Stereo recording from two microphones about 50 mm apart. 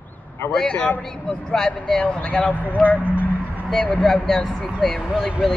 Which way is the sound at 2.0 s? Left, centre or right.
Left.